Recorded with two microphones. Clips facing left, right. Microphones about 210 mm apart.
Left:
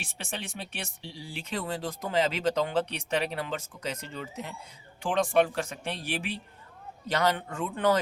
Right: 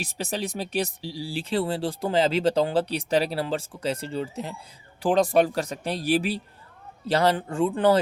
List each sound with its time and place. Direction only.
0.0 s speech: 40° right (ahead or behind)